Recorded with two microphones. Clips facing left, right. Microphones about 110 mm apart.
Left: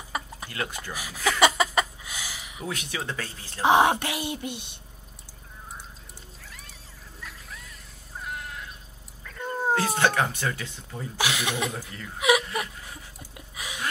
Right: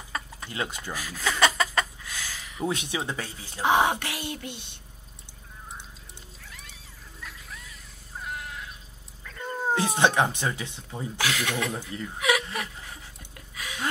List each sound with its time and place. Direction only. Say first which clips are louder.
0.1 s a sound: left 2 dB; 15° left (ahead or behind)
0.5 s speech: right 1 dB; 20° right (ahead or behind)
0.9 s a sound: left 3 dB; 15° left (ahead or behind)
2.6 s speech: right 4 dB; 25° right (ahead or behind)
3.6 s speech: left 3 dB; 20° left (ahead or behind)
7.2 s a sound: even; centre (ahead or behind)
8.2 s caw: even; centre (ahead or behind)
9.2 s dog: left 2 dB; centre (ahead or behind)
9.8 s speech: right 3 dB; 20° right (ahead or behind)
11.1 s speech: left 1 dB; 15° left (ahead or behind)
12.2 s whimper: left 4 dB; 20° left (ahead or behind)
13.6 s a sound: even; 15° left (ahead or behind)